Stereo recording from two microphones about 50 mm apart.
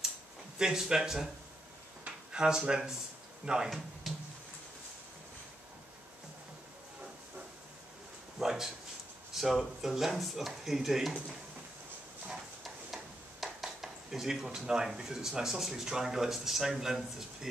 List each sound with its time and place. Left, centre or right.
0.6 s speech: centre
2.0 s a sound: centre
3.4 s speech: centre
4.1 s a sound: centre
8.4 s speech: centre
12.3 s speech: centre